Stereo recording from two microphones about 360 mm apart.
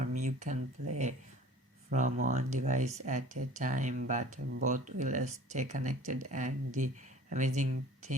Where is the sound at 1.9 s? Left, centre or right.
Right.